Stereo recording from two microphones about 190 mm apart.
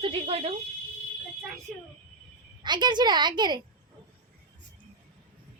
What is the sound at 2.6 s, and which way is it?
Speech, 25° right (ahead or behind).